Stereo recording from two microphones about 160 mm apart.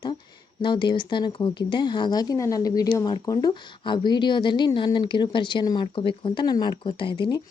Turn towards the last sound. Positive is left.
turn(degrees=30)  # may be behind; listen again after turning